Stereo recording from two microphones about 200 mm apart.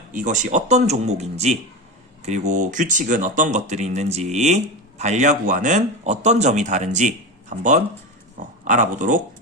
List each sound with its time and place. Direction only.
0.1 s speech: 40° right (ahead or behind)